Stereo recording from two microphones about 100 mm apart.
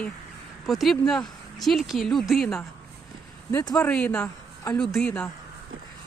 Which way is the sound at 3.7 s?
10° left (ahead or behind).